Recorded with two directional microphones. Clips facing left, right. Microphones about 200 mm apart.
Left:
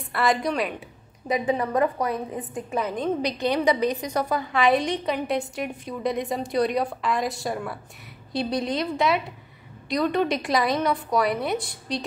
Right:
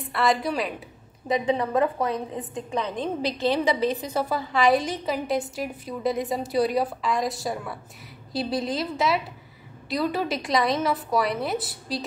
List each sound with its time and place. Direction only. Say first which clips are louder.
0.0 s a woman's voice: even; centre (ahead or behind)
2.0 s a woman's voice: even; 20° right (ahead or behind)
2.7 s a woman's voice: left 2 dB; centre (ahead or behind)